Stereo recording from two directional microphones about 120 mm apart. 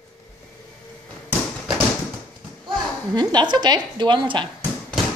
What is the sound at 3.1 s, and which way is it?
A woman's voice, 35° right (ahead or behind).